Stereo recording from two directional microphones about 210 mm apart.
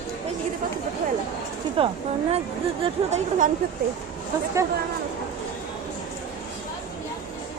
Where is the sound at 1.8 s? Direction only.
25° right (ahead or behind).